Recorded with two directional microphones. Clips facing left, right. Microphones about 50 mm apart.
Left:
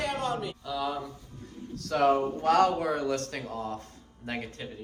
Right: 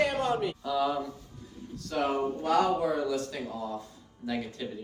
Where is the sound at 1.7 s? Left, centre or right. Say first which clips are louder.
Left 5 dB; left.